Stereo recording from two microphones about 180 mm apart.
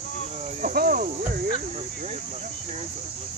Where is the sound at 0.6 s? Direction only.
55° right (ahead or behind).